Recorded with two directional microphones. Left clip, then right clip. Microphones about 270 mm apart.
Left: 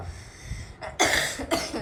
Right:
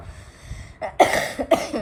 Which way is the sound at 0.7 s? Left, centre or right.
Centre.